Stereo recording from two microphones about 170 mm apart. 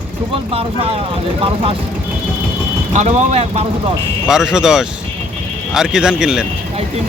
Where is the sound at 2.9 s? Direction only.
40° right (ahead or behind).